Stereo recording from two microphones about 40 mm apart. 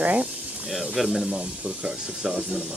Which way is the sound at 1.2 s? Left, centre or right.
Right.